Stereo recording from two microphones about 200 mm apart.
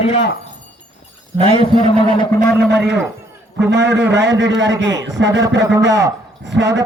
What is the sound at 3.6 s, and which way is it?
A man's voice, 60° right (ahead or behind).